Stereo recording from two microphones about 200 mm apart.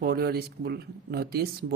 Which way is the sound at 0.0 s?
50° right (ahead or behind).